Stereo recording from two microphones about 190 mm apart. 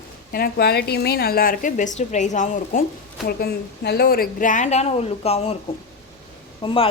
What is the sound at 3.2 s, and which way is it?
A woman's voice, 55° left (ahead or behind).